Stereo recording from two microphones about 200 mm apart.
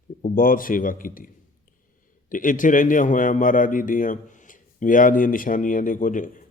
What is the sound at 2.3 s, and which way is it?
A man's voice, 40° left (ahead or behind).